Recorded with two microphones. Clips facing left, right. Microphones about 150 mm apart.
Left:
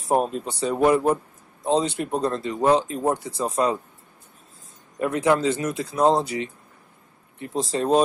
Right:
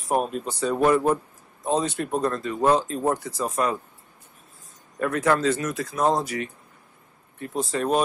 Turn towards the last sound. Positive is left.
turn(degrees=25)  # may be behind; listen again after turning